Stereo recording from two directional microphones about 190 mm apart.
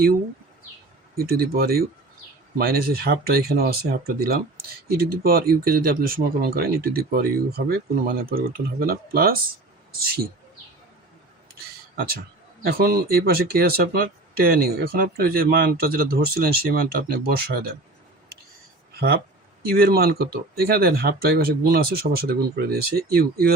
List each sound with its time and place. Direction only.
1.1 s speech: 55° right (ahead or behind)
12.6 s speech: 55° right (ahead or behind)
18.9 s speech: 55° right (ahead or behind)